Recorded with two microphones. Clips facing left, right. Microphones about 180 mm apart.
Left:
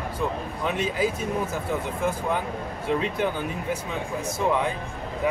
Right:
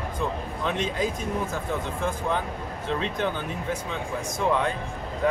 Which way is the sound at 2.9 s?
10° left (ahead or behind).